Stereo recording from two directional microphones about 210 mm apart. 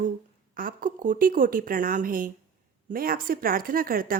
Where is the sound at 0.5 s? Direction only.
40° right (ahead or behind).